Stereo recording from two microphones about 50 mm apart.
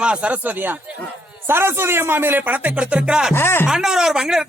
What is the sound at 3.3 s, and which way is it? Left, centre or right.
Speech, left.